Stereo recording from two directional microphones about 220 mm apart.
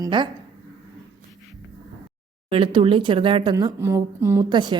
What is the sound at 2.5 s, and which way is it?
A woman's voice, 25° right (ahead or behind).